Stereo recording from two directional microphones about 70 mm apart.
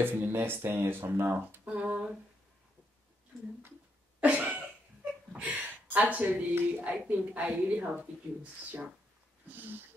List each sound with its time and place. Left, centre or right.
0.0 s a woman's voice: right
1.9 s a sound: centre
4.2 s cough: right
5.3 s a woman's voice: right
9.5 s a woman's voice: right